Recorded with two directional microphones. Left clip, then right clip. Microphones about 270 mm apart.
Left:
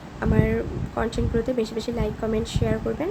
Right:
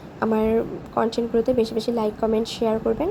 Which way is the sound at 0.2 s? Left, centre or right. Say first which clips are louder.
Right 4 dB; centre.